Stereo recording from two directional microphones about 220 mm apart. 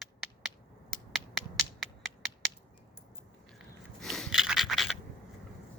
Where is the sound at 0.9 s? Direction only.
Centre (ahead or behind).